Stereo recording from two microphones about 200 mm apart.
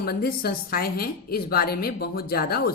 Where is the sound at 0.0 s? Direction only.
50° left (ahead or behind).